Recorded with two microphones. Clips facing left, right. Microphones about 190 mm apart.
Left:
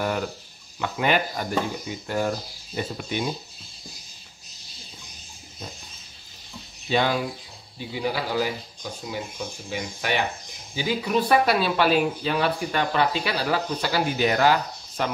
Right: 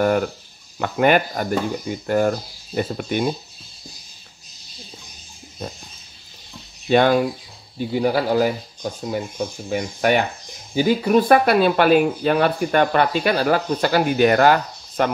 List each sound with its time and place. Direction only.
0.7 s speech: 50° right (ahead or behind)
6.9 s speech: 55° right (ahead or behind)
9.7 s speech: 50° right (ahead or behind)